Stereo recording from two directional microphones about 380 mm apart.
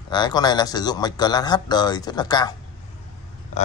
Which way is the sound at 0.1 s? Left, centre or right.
Centre.